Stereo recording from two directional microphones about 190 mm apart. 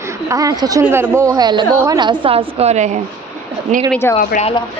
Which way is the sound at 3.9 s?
10° left (ahead or behind).